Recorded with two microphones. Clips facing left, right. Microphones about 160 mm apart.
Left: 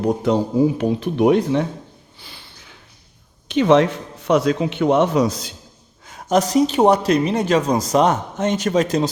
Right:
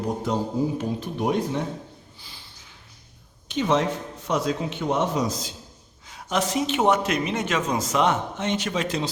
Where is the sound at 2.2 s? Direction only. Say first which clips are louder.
Left 5 dB; 65° left (ahead or behind).